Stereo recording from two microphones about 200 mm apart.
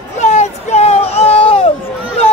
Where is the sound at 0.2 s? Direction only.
35° left (ahead or behind).